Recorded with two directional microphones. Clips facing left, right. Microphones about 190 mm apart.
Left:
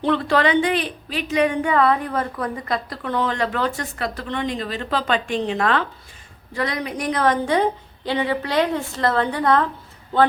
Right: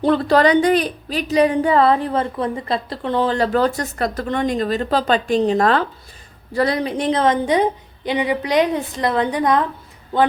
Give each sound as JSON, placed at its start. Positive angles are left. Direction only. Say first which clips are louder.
{"t": 0.0, "sound": "a woman's voice", "louder": "right 4 dB", "side_deg": -40}